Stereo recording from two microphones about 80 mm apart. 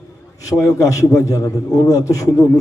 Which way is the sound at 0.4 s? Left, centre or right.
Left.